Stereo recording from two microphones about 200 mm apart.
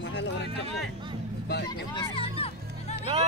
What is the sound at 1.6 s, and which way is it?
Speech, 25° left (ahead or behind).